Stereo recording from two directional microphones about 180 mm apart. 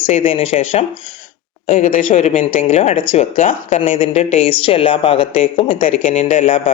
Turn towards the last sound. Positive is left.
turn(degrees=35)  # may be behind; listen again after turning